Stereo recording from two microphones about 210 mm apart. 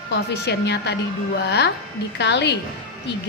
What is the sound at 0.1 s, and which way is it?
A woman's voice, 50° left (ahead or behind).